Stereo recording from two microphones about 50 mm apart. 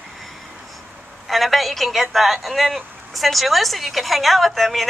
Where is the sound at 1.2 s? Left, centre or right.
Centre.